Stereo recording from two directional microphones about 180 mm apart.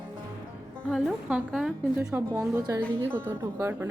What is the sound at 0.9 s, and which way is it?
A woman's voice, centre (ahead or behind).